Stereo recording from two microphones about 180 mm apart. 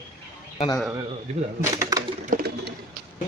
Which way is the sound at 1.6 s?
20° right (ahead or behind).